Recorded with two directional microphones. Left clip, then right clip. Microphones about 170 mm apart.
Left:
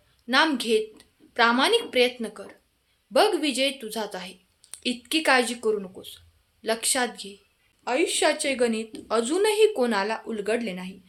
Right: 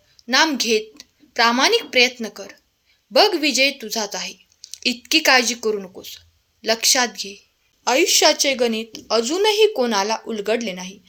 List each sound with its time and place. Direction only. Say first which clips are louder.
0.3 s speech: right 4 dB; 25° right (ahead or behind)
7.9 s a woman's voice: right 7 dB; 45° right (ahead or behind)
8.4 s speech: right 5 dB; 25° right (ahead or behind)